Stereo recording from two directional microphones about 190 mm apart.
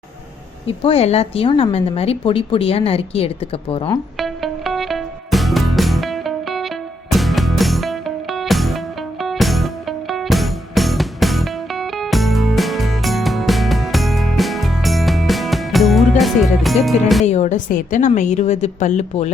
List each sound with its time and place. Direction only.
0.8 s a woman's voice: 30° left (ahead or behind)
4.2 s music: centre (ahead or behind)
17.2 s a woman's voice: 35° left (ahead or behind)